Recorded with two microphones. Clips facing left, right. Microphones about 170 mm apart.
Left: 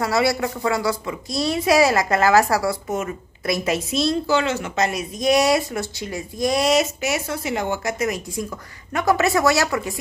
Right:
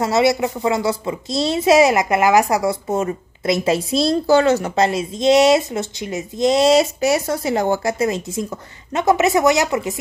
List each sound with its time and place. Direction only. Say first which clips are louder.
0.0 s a woman's voice: right 4 dB; 20° right (ahead or behind)